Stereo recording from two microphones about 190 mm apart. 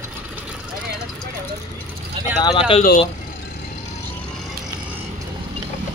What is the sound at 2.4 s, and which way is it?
Speech, 25° left (ahead or behind).